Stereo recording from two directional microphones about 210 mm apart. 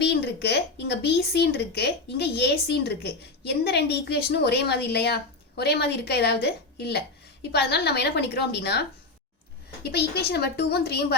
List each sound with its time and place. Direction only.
0.0 s speech: 50° left (ahead or behind)